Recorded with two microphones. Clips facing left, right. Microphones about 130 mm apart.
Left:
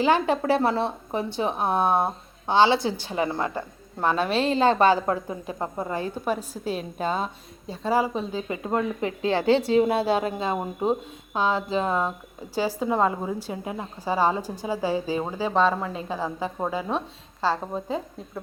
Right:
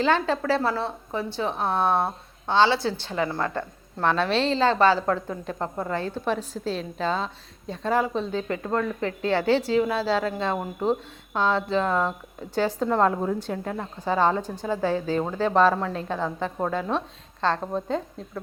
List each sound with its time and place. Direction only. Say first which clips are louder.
0.0 s a woman's voice: left 1 dB; 15° left (ahead or behind)